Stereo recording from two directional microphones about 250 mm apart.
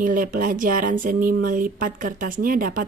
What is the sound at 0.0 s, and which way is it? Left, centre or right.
Speech, right.